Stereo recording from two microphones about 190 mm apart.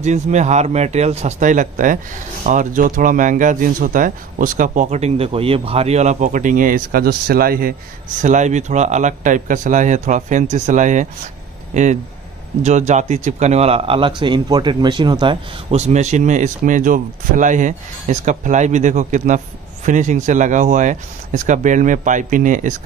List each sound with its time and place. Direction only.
0.0 s a man's voice: 40° right (ahead or behind)